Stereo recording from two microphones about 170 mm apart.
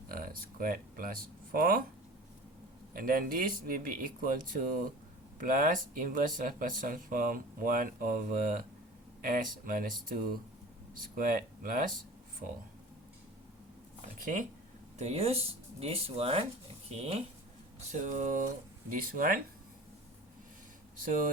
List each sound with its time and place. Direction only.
0.1 s speech: 60° right (ahead or behind)
2.9 s speech: 55° right (ahead or behind)
14.2 s speech: 50° right (ahead or behind)
17.7 s speech: 45° right (ahead or behind)